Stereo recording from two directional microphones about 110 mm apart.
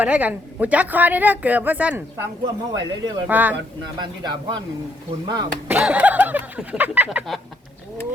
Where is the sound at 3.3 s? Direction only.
15° right (ahead or behind).